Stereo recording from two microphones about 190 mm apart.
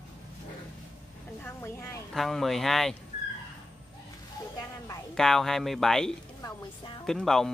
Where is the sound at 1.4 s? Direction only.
15° left (ahead or behind).